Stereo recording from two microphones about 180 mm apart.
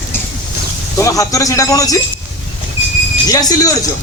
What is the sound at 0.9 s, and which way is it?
Speech, 15° left (ahead or behind).